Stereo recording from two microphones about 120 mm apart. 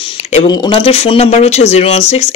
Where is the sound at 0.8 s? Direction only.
55° left (ahead or behind).